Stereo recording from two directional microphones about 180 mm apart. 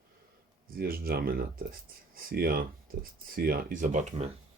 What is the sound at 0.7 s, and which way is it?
Speech, 55° right (ahead or behind).